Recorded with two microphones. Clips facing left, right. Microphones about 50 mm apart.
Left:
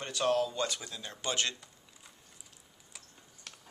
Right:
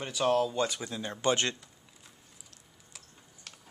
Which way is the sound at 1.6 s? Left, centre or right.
Centre.